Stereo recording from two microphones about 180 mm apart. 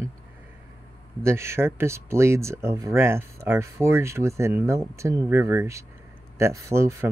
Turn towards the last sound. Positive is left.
turn(degrees=-15)  # may be behind; listen again after turning